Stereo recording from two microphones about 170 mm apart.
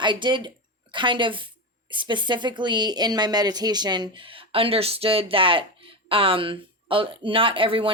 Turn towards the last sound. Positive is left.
turn(degrees=-30)  # may be behind; listen again after turning